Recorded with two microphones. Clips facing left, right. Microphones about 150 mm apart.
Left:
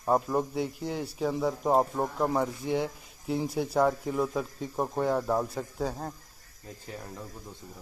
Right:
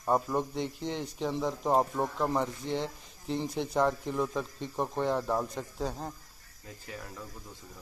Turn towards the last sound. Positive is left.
turn(degrees=5)  # may be behind; listen again after turning